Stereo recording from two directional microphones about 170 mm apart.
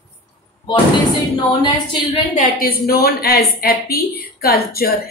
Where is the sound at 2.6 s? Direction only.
60° left (ahead or behind).